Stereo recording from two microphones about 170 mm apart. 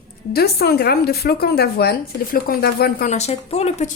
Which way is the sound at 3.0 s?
40° left (ahead or behind).